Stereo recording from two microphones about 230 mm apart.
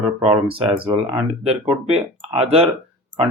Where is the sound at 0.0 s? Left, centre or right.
Right.